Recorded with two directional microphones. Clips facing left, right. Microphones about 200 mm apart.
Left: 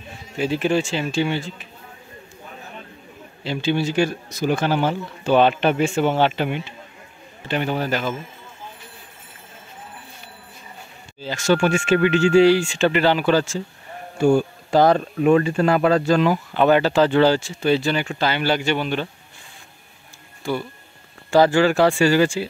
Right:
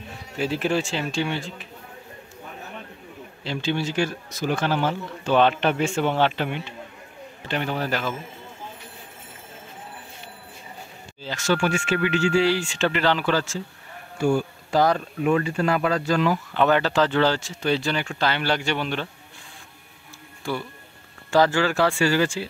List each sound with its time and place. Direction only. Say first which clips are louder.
0.4 s speech: left 3 dB; centre (ahead or behind)
3.4 s speech: left 4 dB; 10° left (ahead or behind)
11.1 s speech: left 4 dB; 10° left (ahead or behind)
14.1 s speech: left 5 dB; 25° left (ahead or behind)
16.5 s speech: left 4 dB; 10° left (ahead or behind)
20.4 s speech: left 4 dB; centre (ahead or behind)
21.3 s speech: left 4 dB; 15° left (ahead or behind)